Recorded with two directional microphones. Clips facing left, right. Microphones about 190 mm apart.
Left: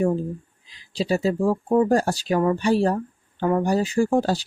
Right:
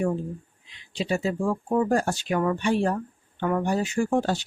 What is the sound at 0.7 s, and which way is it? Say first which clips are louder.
Speech: left 4 dB; 35° left (ahead or behind).